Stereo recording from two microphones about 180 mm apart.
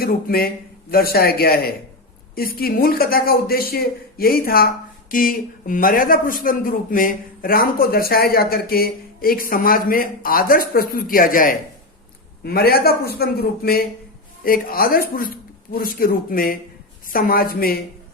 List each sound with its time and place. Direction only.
0.0 s a man's voice: 55° left (ahead or behind)